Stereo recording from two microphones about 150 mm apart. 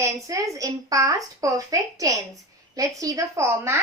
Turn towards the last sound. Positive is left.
turn(degrees=-20)  # may be behind; listen again after turning